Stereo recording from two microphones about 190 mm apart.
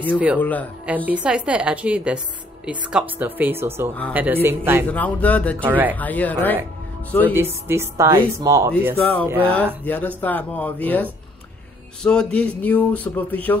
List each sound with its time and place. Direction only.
0.4 s speech: 10° left (ahead or behind)
0.8 s a woman's voice: 10° right (ahead or behind)
4.8 s speech: 10° left (ahead or behind)
5.6 s a woman's voice: 10° right (ahead or behind)
5.9 s speech: 10° left (ahead or behind)
7.3 s a woman's voice: 10° right (ahead or behind)
8.9 s speech: 10° left (ahead or behind)
9.2 s a woman's voice: 10° right (ahead or behind)
9.8 s speech: 10° left (ahead or behind)